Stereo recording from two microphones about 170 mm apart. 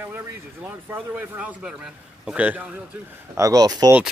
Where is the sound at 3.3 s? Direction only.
20° right (ahead or behind).